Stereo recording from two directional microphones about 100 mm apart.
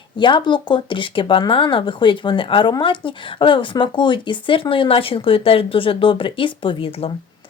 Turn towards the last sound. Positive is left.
turn(degrees=65)  # may be behind; listen again after turning